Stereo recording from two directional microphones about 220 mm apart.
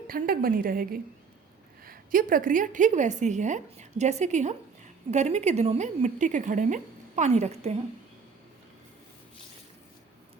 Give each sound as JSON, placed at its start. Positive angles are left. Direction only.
{"t": 0.1, "sound": "a woman's voice", "side_deg": -40}